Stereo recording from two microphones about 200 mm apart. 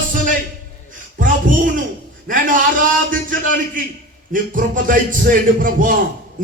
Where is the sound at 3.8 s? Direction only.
40° right (ahead or behind).